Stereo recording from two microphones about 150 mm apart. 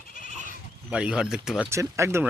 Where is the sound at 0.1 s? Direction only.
60° left (ahead or behind).